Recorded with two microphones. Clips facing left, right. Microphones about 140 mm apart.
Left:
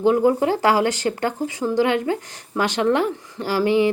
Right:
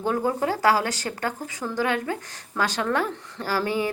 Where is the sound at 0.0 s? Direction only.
20° left (ahead or behind).